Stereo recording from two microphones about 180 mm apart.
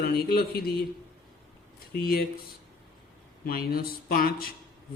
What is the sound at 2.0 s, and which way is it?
Speech, 60° left (ahead or behind).